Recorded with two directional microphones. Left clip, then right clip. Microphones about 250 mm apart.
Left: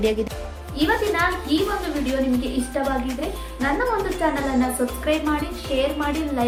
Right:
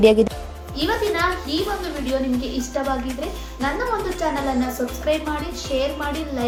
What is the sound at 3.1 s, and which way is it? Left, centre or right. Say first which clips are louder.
Speech: left 1 dB; centre.